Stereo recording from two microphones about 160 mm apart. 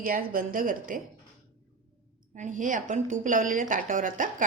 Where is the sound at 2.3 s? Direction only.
50° right (ahead or behind).